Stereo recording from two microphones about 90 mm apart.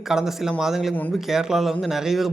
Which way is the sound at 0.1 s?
5° right (ahead or behind).